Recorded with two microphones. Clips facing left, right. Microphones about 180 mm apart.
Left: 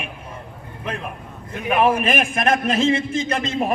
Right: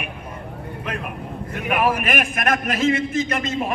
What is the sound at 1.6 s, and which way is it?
A man's voice, 25° left (ahead or behind).